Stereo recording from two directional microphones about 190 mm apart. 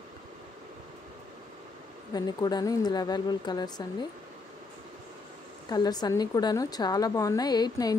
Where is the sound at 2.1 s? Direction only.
20° left (ahead or behind).